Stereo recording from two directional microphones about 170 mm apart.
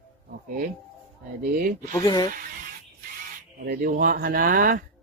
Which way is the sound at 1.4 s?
50° right (ahead or behind).